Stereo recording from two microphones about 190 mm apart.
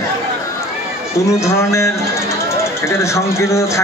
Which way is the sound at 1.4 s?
15° left (ahead or behind).